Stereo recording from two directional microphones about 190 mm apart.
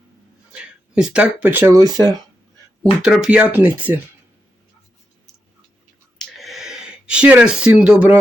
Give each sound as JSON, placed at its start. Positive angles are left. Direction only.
{"t": 0.5, "sound": "speech", "side_deg": -5}
{"t": 3.0, "sound": "speech", "side_deg": -5}
{"t": 6.1, "sound": "a sound", "side_deg": 0}